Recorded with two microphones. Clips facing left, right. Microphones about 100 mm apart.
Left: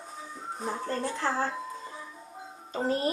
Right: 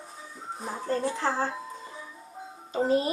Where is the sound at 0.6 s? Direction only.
Centre (ahead or behind).